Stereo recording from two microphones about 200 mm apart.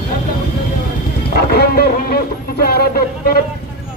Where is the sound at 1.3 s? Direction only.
50° left (ahead or behind).